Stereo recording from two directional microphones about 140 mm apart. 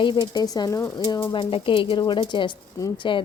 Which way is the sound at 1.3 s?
40° left (ahead or behind).